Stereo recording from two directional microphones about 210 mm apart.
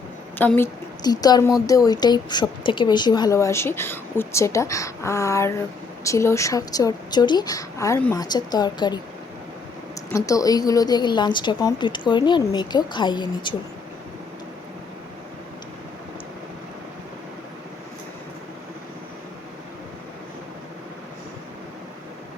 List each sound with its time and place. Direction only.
0.3 s a woman's voice: 10° left (ahead or behind)